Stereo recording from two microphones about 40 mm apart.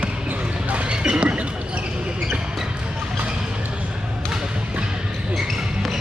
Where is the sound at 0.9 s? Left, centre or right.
Right.